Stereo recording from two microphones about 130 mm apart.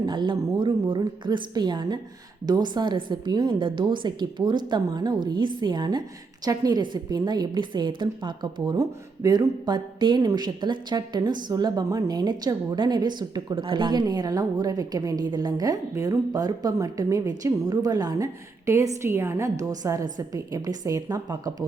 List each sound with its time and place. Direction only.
0.0 s a woman's voice: 35° right (ahead or behind)